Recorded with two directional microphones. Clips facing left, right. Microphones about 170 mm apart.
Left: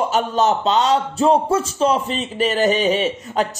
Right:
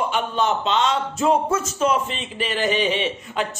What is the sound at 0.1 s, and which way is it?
A man's voice, 40° left (ahead or behind).